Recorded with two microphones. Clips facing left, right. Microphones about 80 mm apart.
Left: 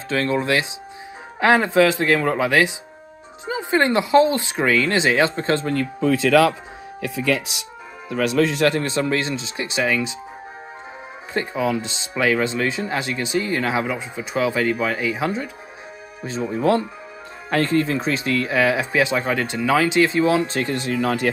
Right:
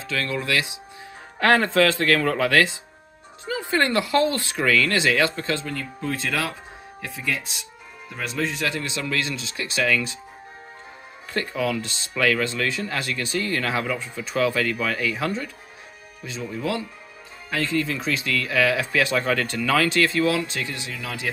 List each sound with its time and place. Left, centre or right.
0.1 s speech: left
1.4 s speech: centre; by 5.6 s left
5.6 s speech: left
5.9 s speech: left
11.3 s speech: left
16.3 s speech: left
20.4 s speech: left